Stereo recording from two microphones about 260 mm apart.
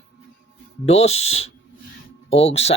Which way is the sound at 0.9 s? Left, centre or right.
Left.